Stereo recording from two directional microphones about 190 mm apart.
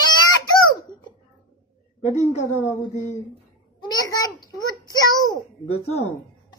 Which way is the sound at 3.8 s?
20° left (ahead or behind).